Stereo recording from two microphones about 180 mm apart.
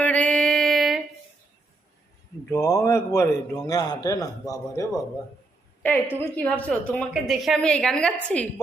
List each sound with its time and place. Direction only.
0.0 s mantra: 10° left (ahead or behind)
2.5 s a man's voice: 15° left (ahead or behind)